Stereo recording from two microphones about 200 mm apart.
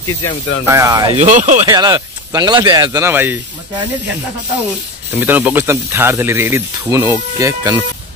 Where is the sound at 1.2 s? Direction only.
40° right (ahead or behind).